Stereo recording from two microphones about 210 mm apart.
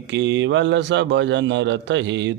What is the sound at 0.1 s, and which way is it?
Speech, 60° right (ahead or behind).